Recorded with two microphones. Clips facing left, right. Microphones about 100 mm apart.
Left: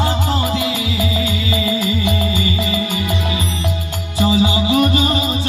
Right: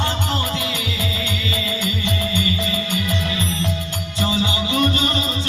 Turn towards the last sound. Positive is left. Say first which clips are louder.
# left 5 dB
turn(degrees=25)  # may be behind; listen again after turning